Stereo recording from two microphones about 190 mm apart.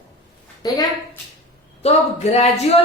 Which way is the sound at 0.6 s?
20° left (ahead or behind).